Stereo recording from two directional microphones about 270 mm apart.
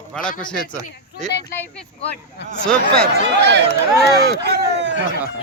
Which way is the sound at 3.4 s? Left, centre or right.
Right.